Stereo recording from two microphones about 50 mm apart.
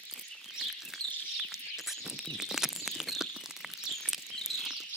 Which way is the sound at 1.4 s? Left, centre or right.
Centre.